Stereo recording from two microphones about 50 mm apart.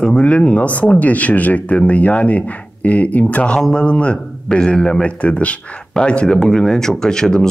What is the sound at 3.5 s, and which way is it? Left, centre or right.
A man's voice, centre.